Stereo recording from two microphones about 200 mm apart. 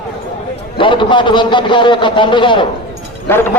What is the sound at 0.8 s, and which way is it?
A man's voice, 25° left (ahead or behind).